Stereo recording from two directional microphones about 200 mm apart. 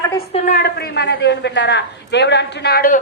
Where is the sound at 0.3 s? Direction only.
40° left (ahead or behind).